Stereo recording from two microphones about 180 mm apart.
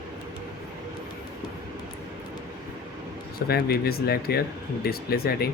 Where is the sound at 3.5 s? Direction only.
60° left (ahead or behind).